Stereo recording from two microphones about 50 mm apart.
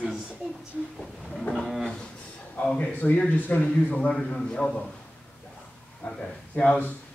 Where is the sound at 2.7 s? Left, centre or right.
Left.